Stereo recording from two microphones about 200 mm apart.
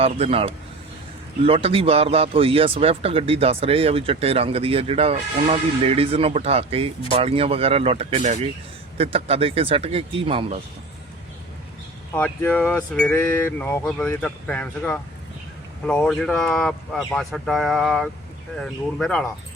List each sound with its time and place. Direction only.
0.0 s speech: 30° right (ahead or behind)
12.1 s speech: 10° left (ahead or behind)